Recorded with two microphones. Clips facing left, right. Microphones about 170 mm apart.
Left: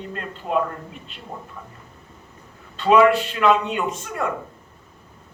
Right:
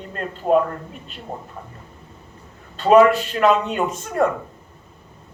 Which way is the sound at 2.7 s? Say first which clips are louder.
Right 2 dB; 40° right (ahead or behind).